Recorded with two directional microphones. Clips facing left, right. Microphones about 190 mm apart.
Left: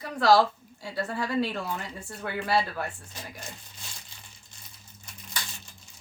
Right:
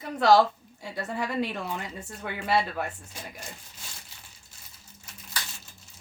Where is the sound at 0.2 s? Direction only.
20° right (ahead or behind).